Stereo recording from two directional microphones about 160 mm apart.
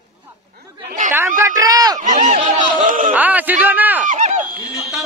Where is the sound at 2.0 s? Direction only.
40° right (ahead or behind).